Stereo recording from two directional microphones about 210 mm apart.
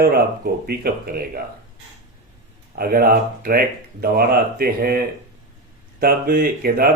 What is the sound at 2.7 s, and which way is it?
Speech, 45° right (ahead or behind).